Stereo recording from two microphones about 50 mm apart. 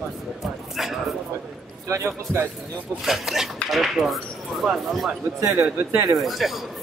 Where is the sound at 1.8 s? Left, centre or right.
Right.